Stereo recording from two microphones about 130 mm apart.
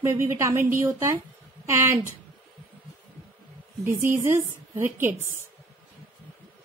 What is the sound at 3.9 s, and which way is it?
A woman's voice, 20° right (ahead or behind).